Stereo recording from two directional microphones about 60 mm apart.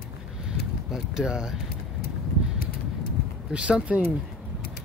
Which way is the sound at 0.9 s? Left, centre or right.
Centre.